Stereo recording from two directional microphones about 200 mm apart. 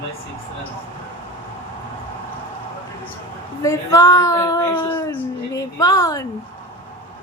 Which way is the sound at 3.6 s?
15° left (ahead or behind).